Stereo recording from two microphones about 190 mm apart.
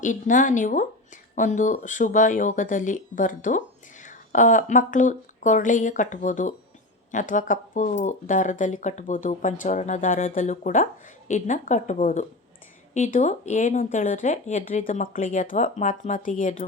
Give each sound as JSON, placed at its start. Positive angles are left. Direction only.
{"t": 0.0, "sound": "speech", "side_deg": 40}